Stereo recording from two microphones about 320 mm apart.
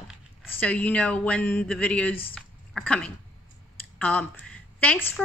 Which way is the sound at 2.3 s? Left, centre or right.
Centre.